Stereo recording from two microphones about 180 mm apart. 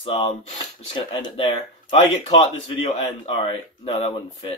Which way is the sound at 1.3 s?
30° left (ahead or behind).